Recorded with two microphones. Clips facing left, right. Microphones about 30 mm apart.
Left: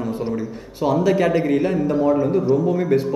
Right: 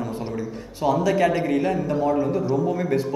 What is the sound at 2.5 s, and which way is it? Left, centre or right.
Speech, left.